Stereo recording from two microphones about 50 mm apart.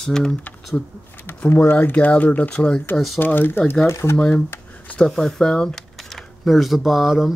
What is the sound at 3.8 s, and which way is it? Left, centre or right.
Speech, left.